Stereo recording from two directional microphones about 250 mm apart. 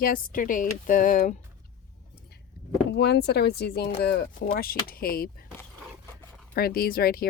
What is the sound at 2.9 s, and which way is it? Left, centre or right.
Speech, left.